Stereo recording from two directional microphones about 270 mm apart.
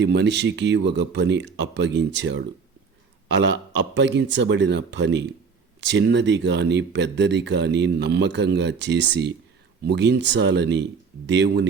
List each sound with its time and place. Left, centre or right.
0.0 s speech: right